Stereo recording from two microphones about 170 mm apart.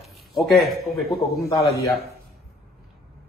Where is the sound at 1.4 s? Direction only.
20° left (ahead or behind).